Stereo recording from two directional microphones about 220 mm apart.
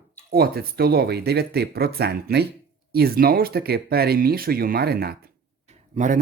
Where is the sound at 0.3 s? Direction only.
45° right (ahead or behind).